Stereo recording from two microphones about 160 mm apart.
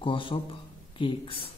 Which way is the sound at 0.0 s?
35° left (ahead or behind).